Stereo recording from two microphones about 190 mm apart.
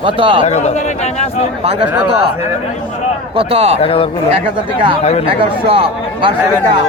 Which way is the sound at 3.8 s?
30° left (ahead or behind).